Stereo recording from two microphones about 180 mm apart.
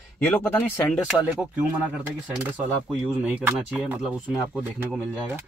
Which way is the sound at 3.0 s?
5° right (ahead or behind).